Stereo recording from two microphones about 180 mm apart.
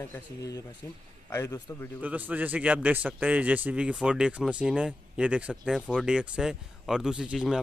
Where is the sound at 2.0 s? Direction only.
10° right (ahead or behind).